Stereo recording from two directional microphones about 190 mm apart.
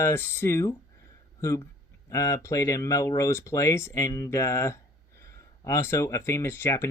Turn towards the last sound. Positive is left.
turn(degrees=10)  # may be behind; listen again after turning